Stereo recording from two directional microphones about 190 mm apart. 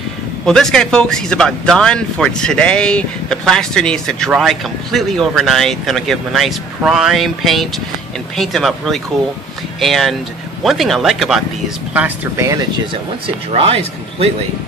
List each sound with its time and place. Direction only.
0.5 s speech: centre (ahead or behind); by 12.8 s 15° right (ahead or behind)
13.5 s speech: 30° right (ahead or behind)